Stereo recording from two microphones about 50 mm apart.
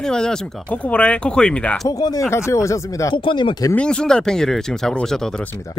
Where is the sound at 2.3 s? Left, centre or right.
Left.